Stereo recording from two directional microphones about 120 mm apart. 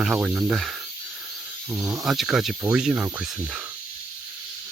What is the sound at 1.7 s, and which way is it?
Speech, 15° right (ahead or behind).